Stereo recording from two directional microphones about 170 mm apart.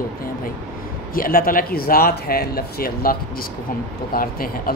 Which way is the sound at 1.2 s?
55° left (ahead or behind).